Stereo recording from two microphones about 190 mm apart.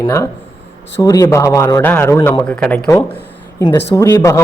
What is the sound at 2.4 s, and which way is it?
Speech, 5° left (ahead or behind).